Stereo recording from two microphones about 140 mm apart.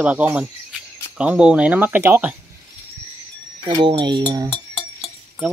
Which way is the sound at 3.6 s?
40° right (ahead or behind).